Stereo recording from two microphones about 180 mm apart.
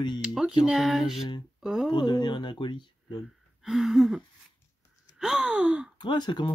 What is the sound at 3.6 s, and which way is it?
Speech, centre (ahead or behind).